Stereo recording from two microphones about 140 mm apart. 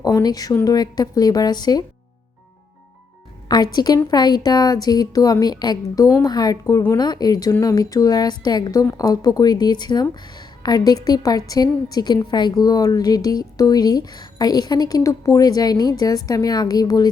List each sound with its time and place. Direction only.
0.0 s a woman's voice: 30° left (ahead or behind)
3.5 s a woman's voice: 30° left (ahead or behind)